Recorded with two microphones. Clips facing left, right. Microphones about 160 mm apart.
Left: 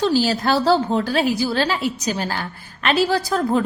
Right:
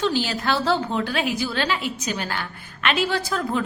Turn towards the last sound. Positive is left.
turn(degrees=35)  # may be behind; listen again after turning